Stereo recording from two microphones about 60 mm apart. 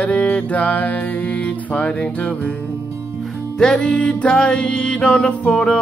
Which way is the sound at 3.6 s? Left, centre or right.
Centre.